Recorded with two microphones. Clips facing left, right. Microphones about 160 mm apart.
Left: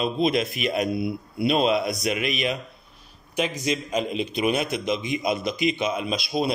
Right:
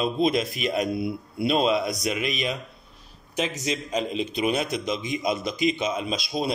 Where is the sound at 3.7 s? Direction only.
35° right (ahead or behind).